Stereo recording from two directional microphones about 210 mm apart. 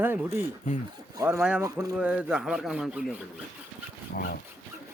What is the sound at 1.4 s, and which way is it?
Speech, 5° right (ahead or behind).